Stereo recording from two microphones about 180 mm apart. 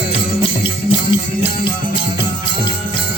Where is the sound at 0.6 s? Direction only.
30° left (ahead or behind).